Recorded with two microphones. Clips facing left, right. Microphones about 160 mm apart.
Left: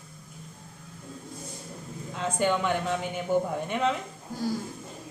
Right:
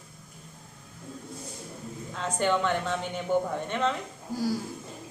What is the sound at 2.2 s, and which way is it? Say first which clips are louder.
Speech: even; 10° left (ahead or behind).